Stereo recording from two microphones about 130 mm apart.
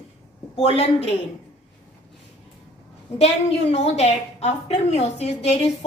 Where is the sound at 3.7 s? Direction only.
55° left (ahead or behind).